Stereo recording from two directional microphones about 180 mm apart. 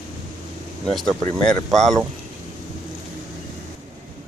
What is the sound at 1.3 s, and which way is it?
Speech, centre (ahead or behind).